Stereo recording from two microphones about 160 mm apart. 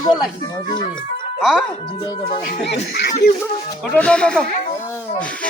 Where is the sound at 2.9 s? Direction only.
70° left (ahead or behind).